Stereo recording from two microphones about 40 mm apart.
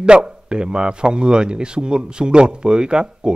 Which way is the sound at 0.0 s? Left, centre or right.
Right.